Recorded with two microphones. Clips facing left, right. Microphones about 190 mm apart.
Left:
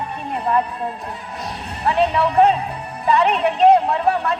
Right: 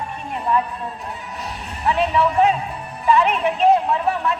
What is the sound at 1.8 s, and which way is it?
A woman's voice, 35° left (ahead or behind).